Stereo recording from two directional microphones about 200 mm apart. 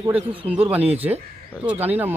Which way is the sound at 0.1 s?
10° right (ahead or behind).